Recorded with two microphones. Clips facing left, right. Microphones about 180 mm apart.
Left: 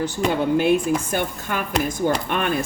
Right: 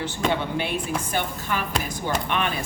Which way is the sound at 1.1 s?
50° left (ahead or behind).